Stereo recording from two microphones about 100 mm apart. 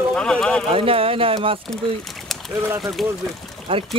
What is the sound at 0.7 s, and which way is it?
Speech, 70° right (ahead or behind).